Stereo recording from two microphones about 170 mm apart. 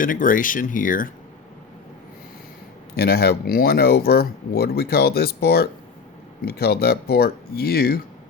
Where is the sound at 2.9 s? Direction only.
65° left (ahead or behind).